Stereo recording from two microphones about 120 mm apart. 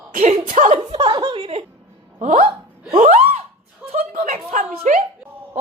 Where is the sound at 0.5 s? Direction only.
90° right.